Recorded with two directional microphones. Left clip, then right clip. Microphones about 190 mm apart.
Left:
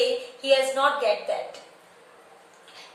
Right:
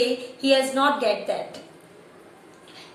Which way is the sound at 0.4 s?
20° right (ahead or behind).